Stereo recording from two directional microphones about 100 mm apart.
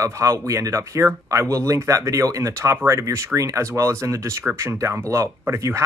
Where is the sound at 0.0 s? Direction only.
30° right (ahead or behind).